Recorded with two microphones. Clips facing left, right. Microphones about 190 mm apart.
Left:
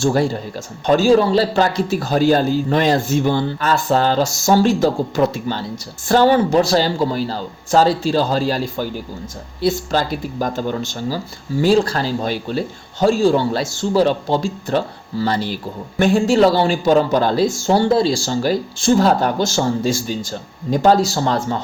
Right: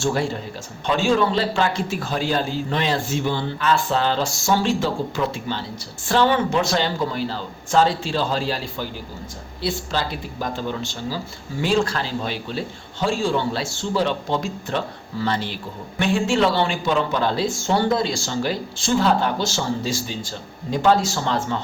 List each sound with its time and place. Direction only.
0.0 s a man's voice: 40° left (ahead or behind)